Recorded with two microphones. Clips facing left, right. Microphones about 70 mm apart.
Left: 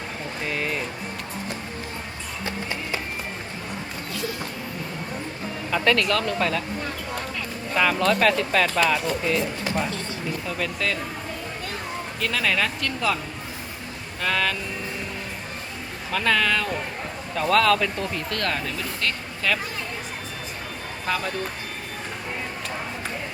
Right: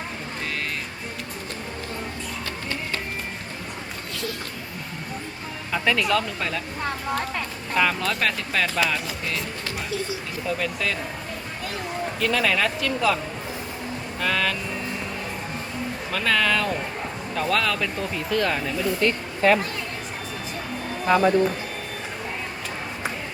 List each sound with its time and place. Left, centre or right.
5.7 s speech: centre
7.8 s speech: centre
10.6 s speech: centre
12.2 s speech: centre
14.2 s speech: centre
16.1 s speech: centre
19.4 s speech: right
21.1 s speech: right